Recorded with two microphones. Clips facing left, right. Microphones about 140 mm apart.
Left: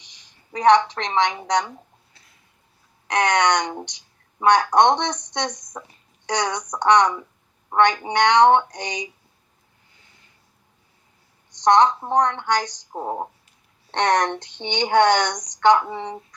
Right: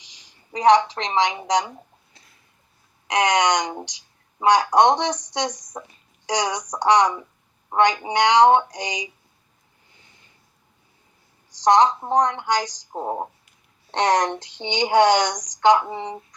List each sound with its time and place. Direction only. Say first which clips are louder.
0.0 s a woman's voice: right 1 dB; 10° right (ahead or behind)
3.1 s speech: even; 10° right (ahead or behind)
11.5 s a woman's voice: even; 10° right (ahead or behind)